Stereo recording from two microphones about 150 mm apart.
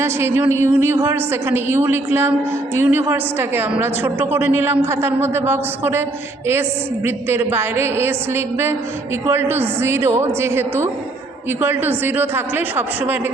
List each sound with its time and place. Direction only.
0.0 s a woman's voice: 15° right (ahead or behind)